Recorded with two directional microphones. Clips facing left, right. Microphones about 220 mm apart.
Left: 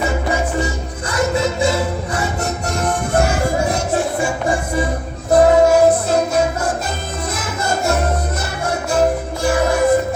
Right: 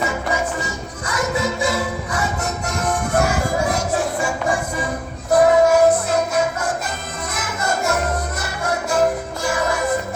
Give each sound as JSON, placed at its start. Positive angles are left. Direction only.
{"t": 0.0, "sound": "music", "side_deg": 30}